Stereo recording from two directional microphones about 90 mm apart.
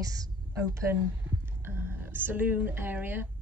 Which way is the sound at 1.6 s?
25° right (ahead or behind).